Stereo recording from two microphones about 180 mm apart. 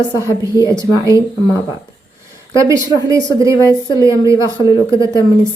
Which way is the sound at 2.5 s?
15° right (ahead or behind).